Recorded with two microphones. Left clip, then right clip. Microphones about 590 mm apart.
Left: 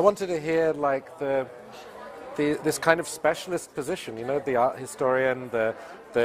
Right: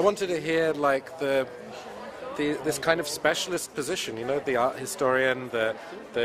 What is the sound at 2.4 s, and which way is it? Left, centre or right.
A man's voice, left.